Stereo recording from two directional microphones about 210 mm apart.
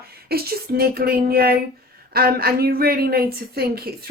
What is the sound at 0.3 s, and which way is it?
A woman's voice, 45° right (ahead or behind).